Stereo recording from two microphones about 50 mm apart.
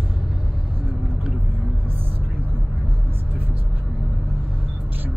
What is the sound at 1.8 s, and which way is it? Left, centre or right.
Vehicle, right.